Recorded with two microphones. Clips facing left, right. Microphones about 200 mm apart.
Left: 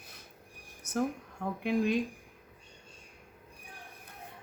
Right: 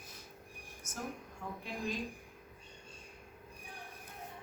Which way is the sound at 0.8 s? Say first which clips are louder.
Left 14 dB; 65° left (ahead or behind).